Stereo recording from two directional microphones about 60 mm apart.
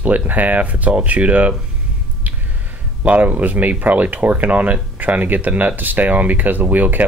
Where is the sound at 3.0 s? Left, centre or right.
Right.